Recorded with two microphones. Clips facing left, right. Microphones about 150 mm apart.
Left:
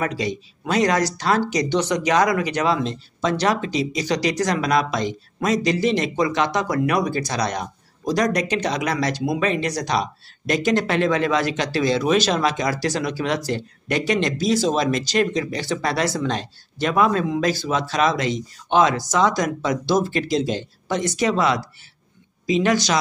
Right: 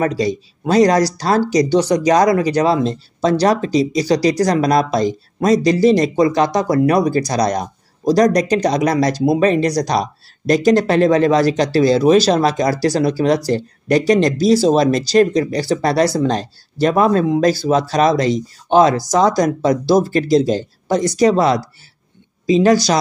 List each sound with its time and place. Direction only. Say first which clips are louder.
0.0 s speech: right 7 dB; 35° right (ahead or behind)